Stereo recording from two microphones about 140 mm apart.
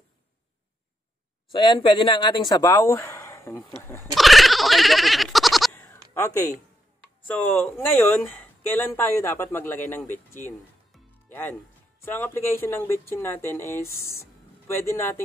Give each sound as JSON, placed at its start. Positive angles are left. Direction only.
{"t": 1.5, "sound": "speech", "side_deg": 35}
{"t": 4.1, "sound": "bleat", "side_deg": 0}
{"t": 5.8, "sound": "bleat", "side_deg": 15}
{"t": 7.2, "sound": "speech", "side_deg": 10}
{"t": 12.0, "sound": "speech", "side_deg": 15}